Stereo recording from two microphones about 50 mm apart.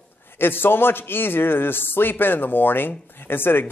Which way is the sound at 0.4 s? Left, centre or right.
Left.